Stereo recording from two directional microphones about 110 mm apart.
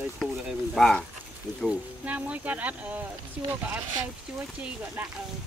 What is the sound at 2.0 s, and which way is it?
Speech, 15° right (ahead or behind).